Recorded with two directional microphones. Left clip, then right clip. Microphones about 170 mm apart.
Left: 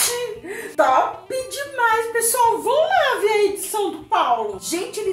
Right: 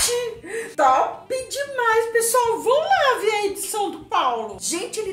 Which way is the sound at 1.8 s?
15° right (ahead or behind).